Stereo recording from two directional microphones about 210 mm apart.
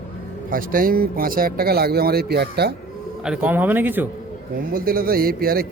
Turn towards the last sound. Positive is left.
turn(degrees=-45)  # may be behind; listen again after turning